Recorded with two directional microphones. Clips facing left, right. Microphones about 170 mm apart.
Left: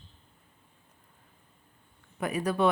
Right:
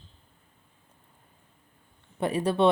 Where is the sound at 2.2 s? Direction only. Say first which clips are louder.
Right 3 dB; 30° right (ahead or behind).